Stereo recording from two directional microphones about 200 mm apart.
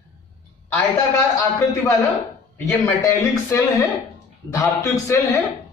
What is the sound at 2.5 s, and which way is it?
A man's voice, 15° left (ahead or behind).